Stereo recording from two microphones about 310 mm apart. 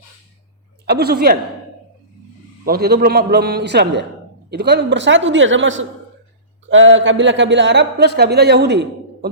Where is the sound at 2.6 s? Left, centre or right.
Right.